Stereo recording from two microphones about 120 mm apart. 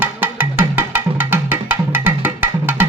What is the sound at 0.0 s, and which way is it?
Music, 15° right (ahead or behind).